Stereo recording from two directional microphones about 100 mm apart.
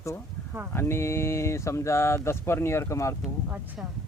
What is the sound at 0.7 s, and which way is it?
Speech, 25° left (ahead or behind).